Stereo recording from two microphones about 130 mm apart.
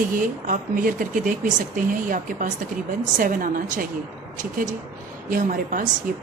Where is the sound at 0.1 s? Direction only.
90° right.